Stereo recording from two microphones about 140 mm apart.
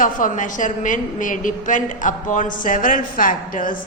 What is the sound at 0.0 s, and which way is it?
A woman's voice, 70° left (ahead or behind).